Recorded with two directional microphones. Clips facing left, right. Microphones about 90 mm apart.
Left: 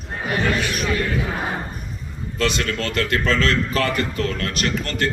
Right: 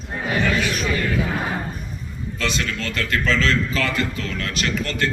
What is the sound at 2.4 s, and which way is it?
A man's voice, 50° left (ahead or behind).